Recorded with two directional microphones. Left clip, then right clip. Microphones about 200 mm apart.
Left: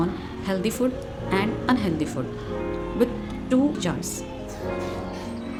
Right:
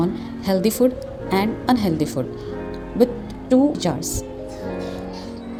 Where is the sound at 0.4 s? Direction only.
15° right (ahead or behind).